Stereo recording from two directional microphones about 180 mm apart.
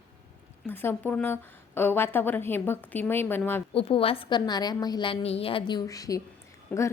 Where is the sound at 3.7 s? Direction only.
30° left (ahead or behind).